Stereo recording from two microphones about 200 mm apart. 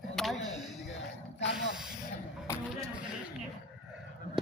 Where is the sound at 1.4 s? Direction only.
60° left (ahead or behind).